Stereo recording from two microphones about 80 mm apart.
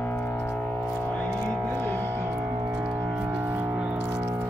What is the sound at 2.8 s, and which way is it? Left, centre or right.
Music, centre.